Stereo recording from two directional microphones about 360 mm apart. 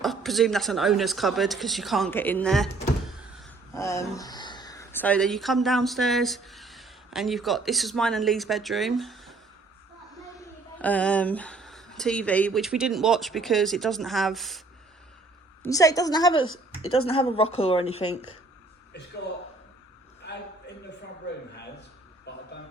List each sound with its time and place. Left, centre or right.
0.0 s speech: centre
3.8 s speech: centre
10.8 s speech: centre
15.6 s a woman's voice: centre
18.1 s speech: left
20.2 s a sound: left
22.3 s a sound: left